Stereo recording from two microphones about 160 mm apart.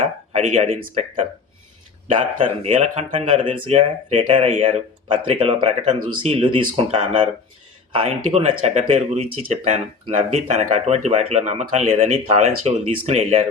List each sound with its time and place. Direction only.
0.3 s speech: 40° right (ahead or behind)
2.6 s speech: 45° right (ahead or behind)